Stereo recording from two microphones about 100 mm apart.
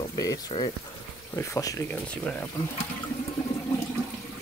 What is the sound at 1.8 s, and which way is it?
Speech, 15° left (ahead or behind).